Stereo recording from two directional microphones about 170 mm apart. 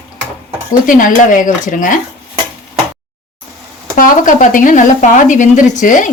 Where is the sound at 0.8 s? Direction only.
50° left (ahead or behind).